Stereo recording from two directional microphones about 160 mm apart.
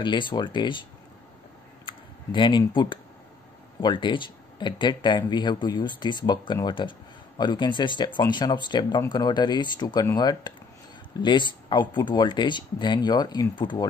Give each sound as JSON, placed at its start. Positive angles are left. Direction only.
{"t": 0.0, "sound": "speech", "side_deg": 30}
{"t": 1.9, "sound": "speech", "side_deg": 30}